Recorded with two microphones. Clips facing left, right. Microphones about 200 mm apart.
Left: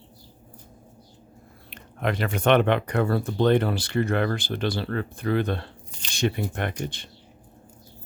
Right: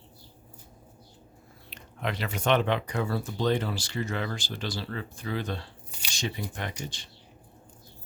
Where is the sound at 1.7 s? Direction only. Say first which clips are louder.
Left 6 dB; 50° left (ahead or behind).